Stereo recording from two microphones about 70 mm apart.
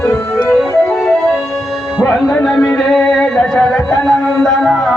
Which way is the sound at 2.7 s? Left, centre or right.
Centre.